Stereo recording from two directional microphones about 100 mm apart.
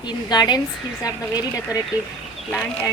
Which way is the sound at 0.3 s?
45° left (ahead or behind).